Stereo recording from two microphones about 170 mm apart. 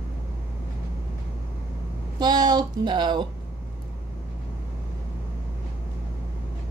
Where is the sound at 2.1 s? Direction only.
25° right (ahead or behind).